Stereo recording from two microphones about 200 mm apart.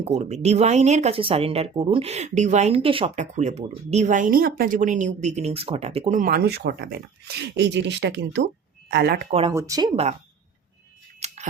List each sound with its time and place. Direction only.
0.0 s speech: 35° right (ahead or behind); by 9.2 s 55° right (ahead or behind)
9.5 s speech: 15° right (ahead or behind)
11.2 s scissors: 30° right (ahead or behind)